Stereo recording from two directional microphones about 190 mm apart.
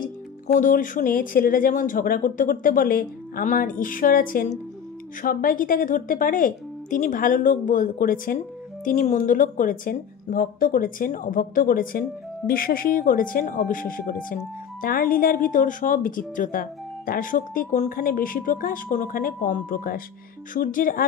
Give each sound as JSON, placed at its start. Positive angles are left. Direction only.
{"t": 0.6, "sound": "a woman's voice", "side_deg": 45}